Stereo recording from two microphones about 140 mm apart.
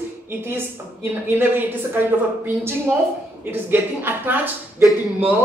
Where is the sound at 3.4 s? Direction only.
15° right (ahead or behind).